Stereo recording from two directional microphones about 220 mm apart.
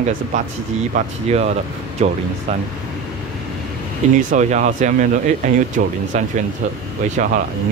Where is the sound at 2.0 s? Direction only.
30° right (ahead or behind).